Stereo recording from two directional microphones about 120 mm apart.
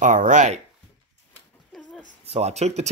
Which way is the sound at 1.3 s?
5° left (ahead or behind).